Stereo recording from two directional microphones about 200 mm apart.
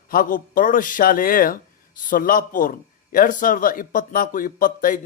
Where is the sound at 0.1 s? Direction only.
45° left (ahead or behind).